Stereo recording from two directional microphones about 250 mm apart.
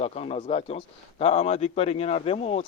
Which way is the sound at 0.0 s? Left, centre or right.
Left.